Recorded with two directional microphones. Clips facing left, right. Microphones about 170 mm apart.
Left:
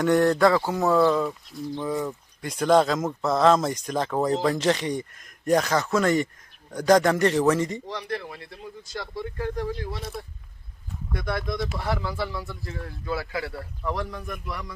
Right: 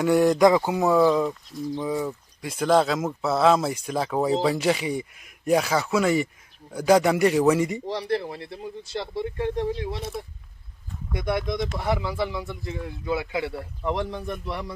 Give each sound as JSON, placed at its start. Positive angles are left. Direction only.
{"t": 0.0, "sound": "speech", "side_deg": -10}
{"t": 7.9, "sound": "speech", "side_deg": -30}
{"t": 11.1, "sound": "speech", "side_deg": -20}